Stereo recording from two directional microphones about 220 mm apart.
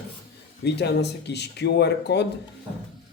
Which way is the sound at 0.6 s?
50° left (ahead or behind).